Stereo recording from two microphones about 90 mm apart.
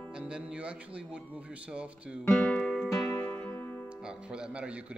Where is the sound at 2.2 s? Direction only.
25° left (ahead or behind).